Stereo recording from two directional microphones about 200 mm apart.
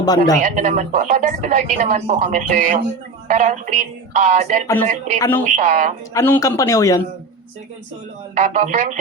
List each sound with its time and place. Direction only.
0.0 s speech: 20° left (ahead or behind)
0.5 s a woman's voice: 40° right (ahead or behind)
4.6 s a man's voice: 10° left (ahead or behind)
5.5 s a woman's voice: 40° right (ahead or behind)
6.1 s a man's voice: 15° left (ahead or behind)
8.4 s a woman's voice: 35° right (ahead or behind)